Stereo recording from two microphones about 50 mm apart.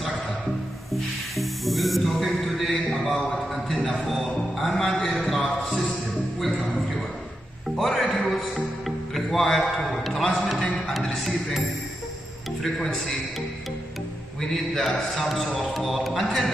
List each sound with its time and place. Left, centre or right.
1.3 s music: centre
2.9 s a sound: centre
4.1 s music: centre
4.8 s a sound: centre
5.4 s a sound: left
7.7 s music: centre
8.0 s music: left
8.8 s music: centre
12.7 s a man's voice: centre
14.8 s a man's voice: centre